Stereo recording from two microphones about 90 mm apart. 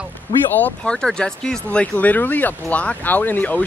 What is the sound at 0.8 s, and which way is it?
Speech, 10° left (ahead or behind).